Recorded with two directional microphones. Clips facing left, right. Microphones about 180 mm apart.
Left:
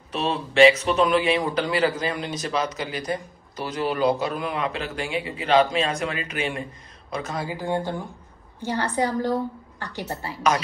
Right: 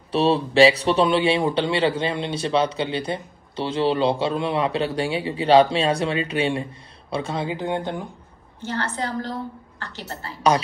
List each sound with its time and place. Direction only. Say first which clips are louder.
0.1 s a man's voice: right 6 dB; 35° right (ahead or behind)
8.6 s a woman's voice: left 3 dB; 15° left (ahead or behind)